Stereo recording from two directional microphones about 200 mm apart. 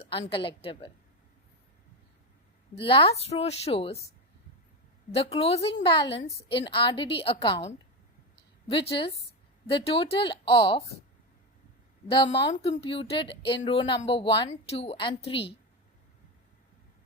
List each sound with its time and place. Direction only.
0.0 s a woman's voice: 25° left (ahead or behind)
2.8 s a woman's voice: 25° left (ahead or behind)
5.1 s a woman's voice: 30° left (ahead or behind)
12.0 s a woman's voice: 25° left (ahead or behind)